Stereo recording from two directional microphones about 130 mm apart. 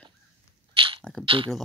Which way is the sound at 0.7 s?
40° right (ahead or behind).